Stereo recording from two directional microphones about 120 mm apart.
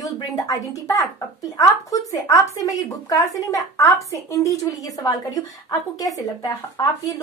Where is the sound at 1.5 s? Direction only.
30° left (ahead or behind).